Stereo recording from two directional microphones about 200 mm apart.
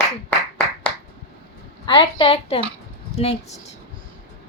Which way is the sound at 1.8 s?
25° left (ahead or behind).